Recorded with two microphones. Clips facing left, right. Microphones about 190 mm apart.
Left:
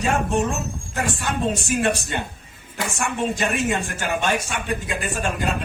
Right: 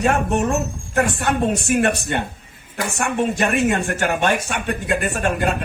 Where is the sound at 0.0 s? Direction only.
60° right (ahead or behind).